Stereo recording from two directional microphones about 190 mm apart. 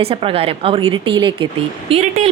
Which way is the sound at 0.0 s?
30° right (ahead or behind).